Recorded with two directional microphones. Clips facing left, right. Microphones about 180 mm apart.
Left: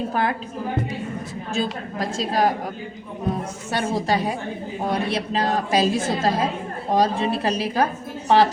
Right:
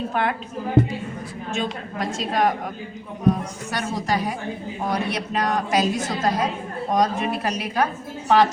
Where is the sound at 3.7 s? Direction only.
30° left (ahead or behind).